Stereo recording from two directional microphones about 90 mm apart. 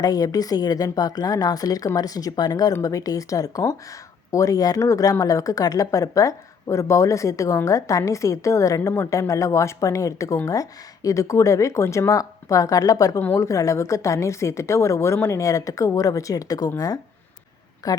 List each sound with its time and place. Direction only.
0.0 s speech: 45° left (ahead or behind)